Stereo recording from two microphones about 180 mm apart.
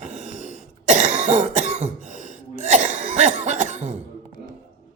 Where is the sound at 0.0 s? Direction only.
40° right (ahead or behind).